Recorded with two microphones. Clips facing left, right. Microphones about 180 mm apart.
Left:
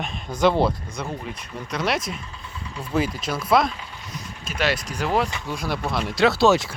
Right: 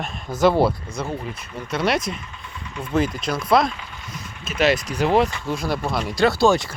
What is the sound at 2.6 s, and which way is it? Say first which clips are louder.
Engine: right 3 dB; 30° left (ahead or behind).